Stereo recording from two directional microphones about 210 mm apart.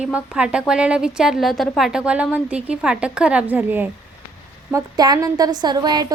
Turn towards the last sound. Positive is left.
turn(degrees=-20)  # may be behind; listen again after turning